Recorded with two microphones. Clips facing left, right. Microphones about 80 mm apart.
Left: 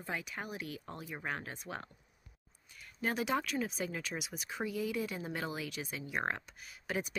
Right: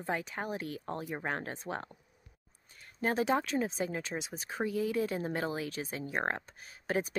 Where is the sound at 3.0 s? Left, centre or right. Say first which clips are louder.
Right 4 dB; right.